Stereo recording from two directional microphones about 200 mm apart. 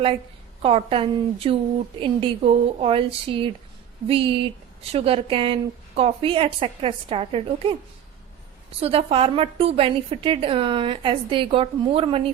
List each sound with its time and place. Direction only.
0.6 s a woman's voice: 25° right (ahead or behind)
8.8 s a woman's voice: 30° right (ahead or behind)